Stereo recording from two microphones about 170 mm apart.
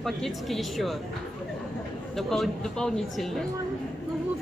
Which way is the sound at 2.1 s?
Centre (ahead or behind).